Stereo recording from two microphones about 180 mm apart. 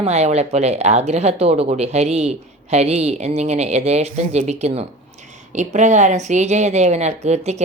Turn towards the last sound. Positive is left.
turn(degrees=-35)  # may be behind; listen again after turning